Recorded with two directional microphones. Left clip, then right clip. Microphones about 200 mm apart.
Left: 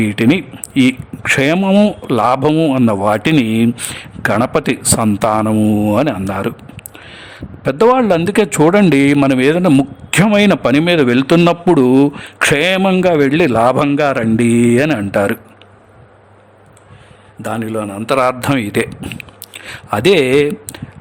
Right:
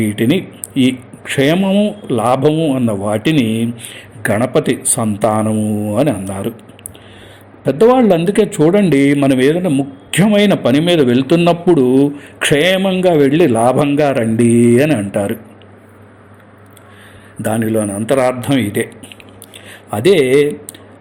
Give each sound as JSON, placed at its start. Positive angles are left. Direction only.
{"t": 0.0, "sound": "a man's voice", "side_deg": 35}
{"t": 1.5, "sound": "a man's voice", "side_deg": 50}
{"t": 2.0, "sound": "a man's voice", "side_deg": 35}
{"t": 7.6, "sound": "a man's voice", "side_deg": 30}
{"t": 17.4, "sound": "a man's voice", "side_deg": 15}
{"t": 18.4, "sound": "a man's voice", "side_deg": 45}
{"t": 19.9, "sound": "a man's voice", "side_deg": 35}